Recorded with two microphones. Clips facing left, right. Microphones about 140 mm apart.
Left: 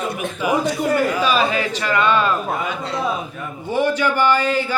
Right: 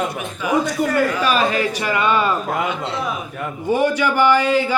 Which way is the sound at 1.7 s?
10° right (ahead or behind).